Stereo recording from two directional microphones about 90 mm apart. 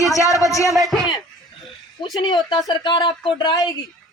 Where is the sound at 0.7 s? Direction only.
Centre (ahead or behind).